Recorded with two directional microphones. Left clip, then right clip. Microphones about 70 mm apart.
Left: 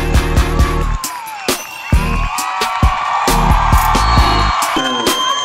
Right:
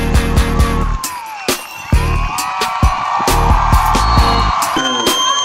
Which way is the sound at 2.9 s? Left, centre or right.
Right.